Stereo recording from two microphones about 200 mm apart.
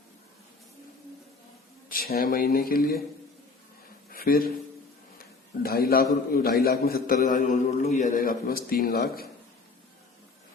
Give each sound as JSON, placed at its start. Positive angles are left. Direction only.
{"t": 1.9, "sound": "a man's voice", "side_deg": 50}
{"t": 4.1, "sound": "speech", "side_deg": 45}
{"t": 5.6, "sound": "a man's voice", "side_deg": 50}